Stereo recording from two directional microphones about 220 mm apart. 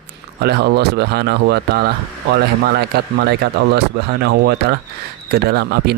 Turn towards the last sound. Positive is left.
turn(degrees=-45)  # may be behind; listen again after turning